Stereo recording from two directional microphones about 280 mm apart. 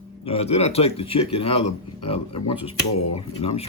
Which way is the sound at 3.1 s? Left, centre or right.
Left.